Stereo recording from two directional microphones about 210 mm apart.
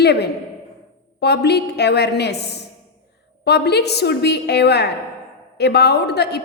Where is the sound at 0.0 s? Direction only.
50° left (ahead or behind).